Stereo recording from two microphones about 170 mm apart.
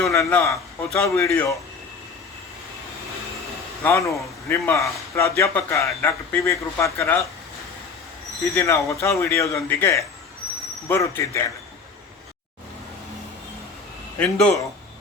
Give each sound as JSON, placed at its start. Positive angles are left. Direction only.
{"t": 0.1, "sound": "a man's voice", "side_deg": 15}
{"t": 3.8, "sound": "a man's voice", "side_deg": 15}
{"t": 8.5, "sound": "a man's voice", "side_deg": 15}
{"t": 14.2, "sound": "speech", "side_deg": 5}